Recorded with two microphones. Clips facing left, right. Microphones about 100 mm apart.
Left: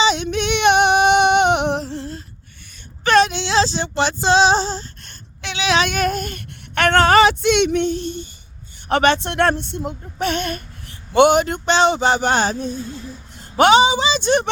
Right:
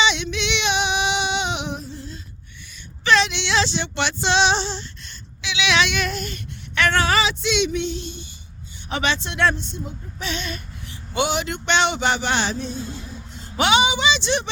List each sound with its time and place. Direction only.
0.0 s female singing: 40° left (ahead or behind); by 2.2 s 60° left (ahead or behind)
3.0 s child singing: 45° left (ahead or behind)
8.9 s a woman's voice: 55° left (ahead or behind)